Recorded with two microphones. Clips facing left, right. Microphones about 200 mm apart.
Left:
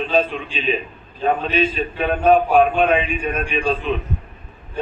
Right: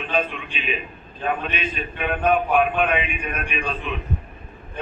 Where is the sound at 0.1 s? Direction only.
30° left (ahead or behind).